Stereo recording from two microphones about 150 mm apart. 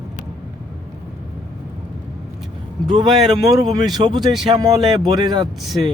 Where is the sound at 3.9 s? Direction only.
30° right (ahead or behind).